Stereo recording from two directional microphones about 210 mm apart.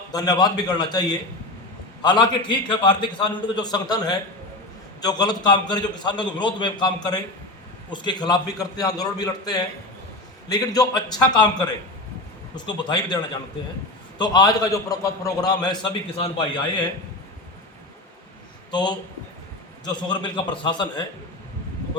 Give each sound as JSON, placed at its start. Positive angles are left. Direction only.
{"t": 0.1, "sound": "a man's voice", "side_deg": 20}
{"t": 14.2, "sound": "a man's voice", "side_deg": 20}
{"t": 18.7, "sound": "a man's voice", "side_deg": 20}